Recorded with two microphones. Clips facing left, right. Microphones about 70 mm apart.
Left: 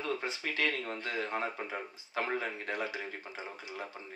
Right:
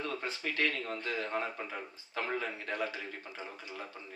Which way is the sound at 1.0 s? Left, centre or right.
Left.